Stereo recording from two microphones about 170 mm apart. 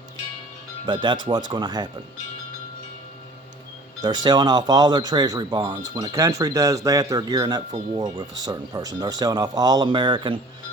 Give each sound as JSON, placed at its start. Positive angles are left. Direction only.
{"t": 0.9, "sound": "speech", "side_deg": -25}
{"t": 4.0, "sound": "speech", "side_deg": -25}